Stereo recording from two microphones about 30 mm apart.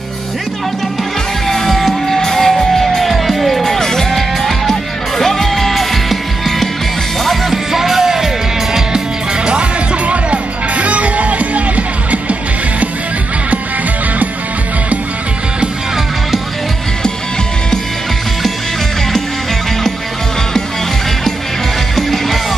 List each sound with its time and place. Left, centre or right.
1.5 s music: centre
3.1 s music: centre
3.6 s music: centre
7.5 s music: centre
10.0 s music: right
21.9 s music: centre